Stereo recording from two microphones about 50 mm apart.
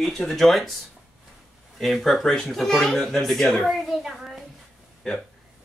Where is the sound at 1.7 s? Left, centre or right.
Centre.